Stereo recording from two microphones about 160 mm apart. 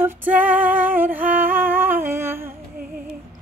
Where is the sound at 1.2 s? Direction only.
60° right (ahead or behind).